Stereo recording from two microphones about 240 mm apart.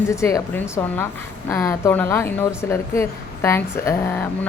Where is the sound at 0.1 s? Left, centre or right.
Centre.